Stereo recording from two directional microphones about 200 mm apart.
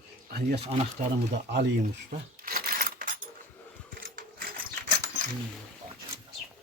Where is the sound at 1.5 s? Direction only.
50° right (ahead or behind).